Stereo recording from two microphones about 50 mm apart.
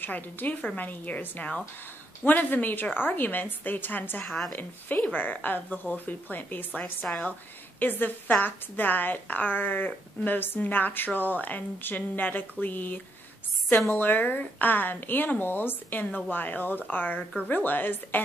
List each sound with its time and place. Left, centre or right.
0.0 s a woman's voice: left